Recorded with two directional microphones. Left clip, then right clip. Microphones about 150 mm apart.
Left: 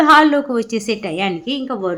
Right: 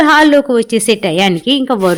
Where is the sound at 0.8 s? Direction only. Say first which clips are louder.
Right 9 dB; 50° right (ahead or behind).